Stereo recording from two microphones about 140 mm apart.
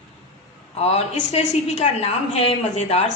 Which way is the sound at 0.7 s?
50° left (ahead or behind).